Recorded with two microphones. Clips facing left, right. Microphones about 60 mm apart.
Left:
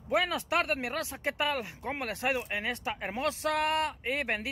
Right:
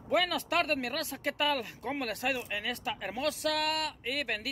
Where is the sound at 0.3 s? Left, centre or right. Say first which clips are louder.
Even; centre.